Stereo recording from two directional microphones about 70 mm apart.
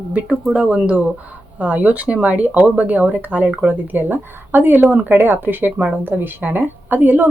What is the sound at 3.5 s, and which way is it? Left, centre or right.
Speech, centre.